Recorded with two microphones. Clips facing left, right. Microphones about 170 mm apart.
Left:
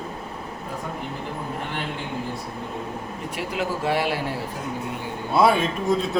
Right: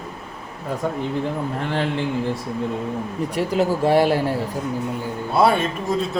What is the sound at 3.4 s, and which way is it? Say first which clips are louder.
Speech: right 7 dB; 40° right (ahead or behind).